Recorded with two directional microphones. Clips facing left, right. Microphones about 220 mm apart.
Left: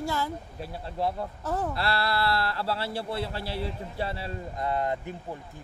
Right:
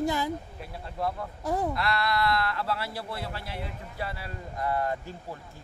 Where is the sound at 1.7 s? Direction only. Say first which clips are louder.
Even; 30° left (ahead or behind).